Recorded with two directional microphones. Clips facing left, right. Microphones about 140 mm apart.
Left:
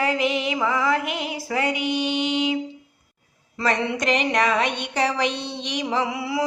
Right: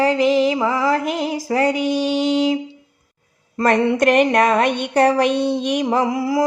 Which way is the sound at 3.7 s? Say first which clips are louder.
Right 7 dB; 55° right (ahead or behind).